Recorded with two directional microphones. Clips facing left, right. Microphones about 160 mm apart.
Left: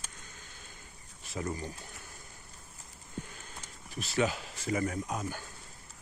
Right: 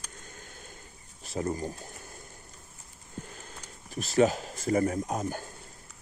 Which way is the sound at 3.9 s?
40° right (ahead or behind).